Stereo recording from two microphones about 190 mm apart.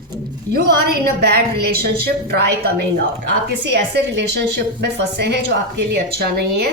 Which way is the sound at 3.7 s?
60° right (ahead or behind).